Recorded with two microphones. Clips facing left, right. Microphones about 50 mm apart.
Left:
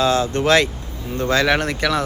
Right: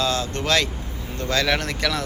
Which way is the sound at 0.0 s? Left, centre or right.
Centre.